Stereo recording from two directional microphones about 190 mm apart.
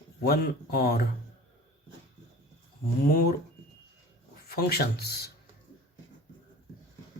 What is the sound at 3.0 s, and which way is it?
Speech, 50° left (ahead or behind).